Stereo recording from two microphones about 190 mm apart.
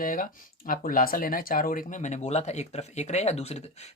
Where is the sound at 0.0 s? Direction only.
45° left (ahead or behind).